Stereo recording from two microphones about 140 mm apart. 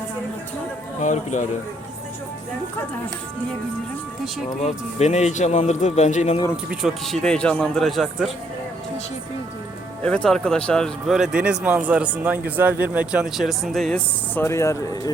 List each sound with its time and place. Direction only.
1.0 s speech: 60° left (ahead or behind)
4.6 s speech: 55° left (ahead or behind)
6.7 s speech: centre (ahead or behind)
10.0 s speech: 10° left (ahead or behind)
14.3 s speech: 20° left (ahead or behind)